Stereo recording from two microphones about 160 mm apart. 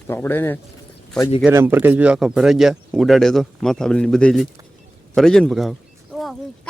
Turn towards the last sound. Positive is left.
turn(degrees=0)  # may be behind; listen again after turning